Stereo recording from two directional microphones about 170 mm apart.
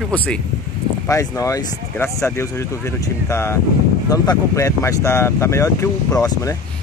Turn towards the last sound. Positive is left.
turn(degrees=20)  # may be behind; listen again after turning